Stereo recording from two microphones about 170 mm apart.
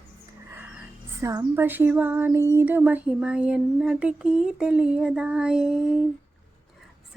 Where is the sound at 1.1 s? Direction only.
15° right (ahead or behind).